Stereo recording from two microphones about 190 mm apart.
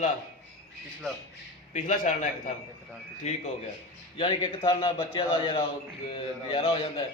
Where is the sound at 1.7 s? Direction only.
40° left (ahead or behind).